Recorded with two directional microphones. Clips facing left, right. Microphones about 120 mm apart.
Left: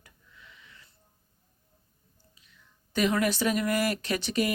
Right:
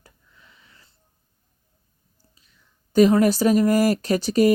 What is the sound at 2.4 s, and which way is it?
A woman's voice, 40° right (ahead or behind).